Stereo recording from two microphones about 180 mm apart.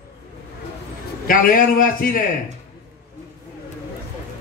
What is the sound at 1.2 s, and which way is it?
Speech, 50° left (ahead or behind).